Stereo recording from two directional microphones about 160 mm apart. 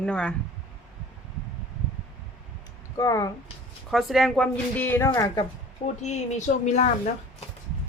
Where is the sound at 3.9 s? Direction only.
Centre (ahead or behind); by 5.5 s 20° left (ahead or behind).